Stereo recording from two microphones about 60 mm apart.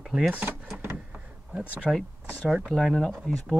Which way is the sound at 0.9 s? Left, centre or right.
Right.